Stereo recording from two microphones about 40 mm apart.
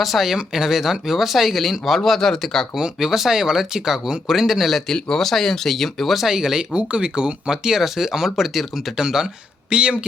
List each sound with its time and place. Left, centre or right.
0.0 s speech: centre
2.7 s speech: centre
4.9 s speech: centre
6.3 s speech: centre
6.7 s speech: right
9.6 s speech: right